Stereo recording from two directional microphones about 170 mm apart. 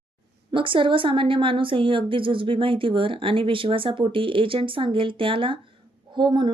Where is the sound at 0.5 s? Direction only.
30° right (ahead or behind).